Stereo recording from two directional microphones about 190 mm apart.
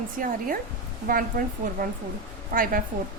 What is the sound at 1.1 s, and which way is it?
A woman's voice, 50° right (ahead or behind).